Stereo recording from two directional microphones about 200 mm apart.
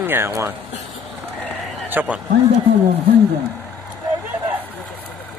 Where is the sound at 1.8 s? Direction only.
10° right (ahead or behind).